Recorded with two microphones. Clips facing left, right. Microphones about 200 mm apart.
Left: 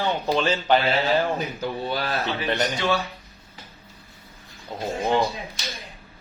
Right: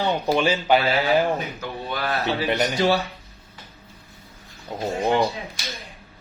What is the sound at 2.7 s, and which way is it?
Speech, 35° right (ahead or behind).